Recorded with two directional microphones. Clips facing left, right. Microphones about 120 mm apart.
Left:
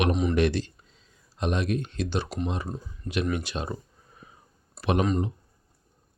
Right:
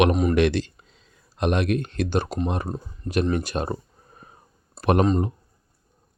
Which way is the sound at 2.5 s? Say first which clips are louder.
Right 4 dB; 55° right (ahead or behind).